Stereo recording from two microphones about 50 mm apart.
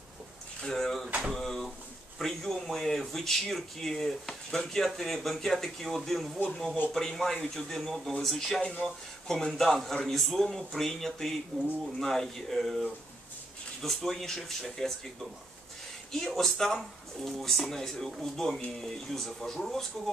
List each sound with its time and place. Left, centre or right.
0.6 s speech: centre
1.3 s drawer open or close: centre
2.1 s speech: centre
8.5 s speech: left
8.8 s speech: centre
16.1 s speech: centre